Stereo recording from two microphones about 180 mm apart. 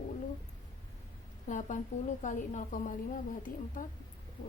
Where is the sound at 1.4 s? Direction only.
45° left (ahead or behind).